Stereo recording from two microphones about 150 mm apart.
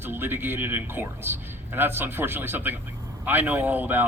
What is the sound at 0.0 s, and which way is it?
A man's voice, 15° right (ahead or behind).